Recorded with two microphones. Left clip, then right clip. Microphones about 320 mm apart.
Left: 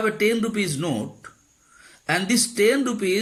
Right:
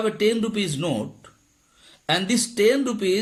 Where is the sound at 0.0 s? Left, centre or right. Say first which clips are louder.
Even; centre.